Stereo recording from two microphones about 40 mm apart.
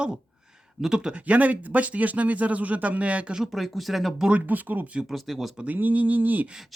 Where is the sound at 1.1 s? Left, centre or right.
Right.